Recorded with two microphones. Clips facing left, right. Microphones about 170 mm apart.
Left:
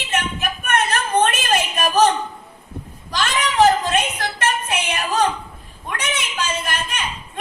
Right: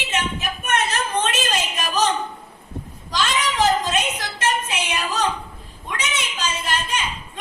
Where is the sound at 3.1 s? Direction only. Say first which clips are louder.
Left 1 dB; 55° left (ahead or behind).